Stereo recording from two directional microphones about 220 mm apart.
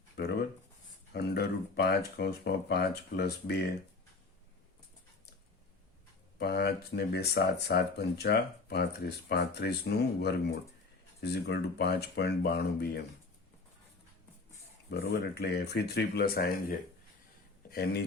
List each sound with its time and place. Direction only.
1.1 s speech: 45° left (ahead or behind)
6.4 s speech: 45° left (ahead or behind)
14.8 s speech: 50° left (ahead or behind)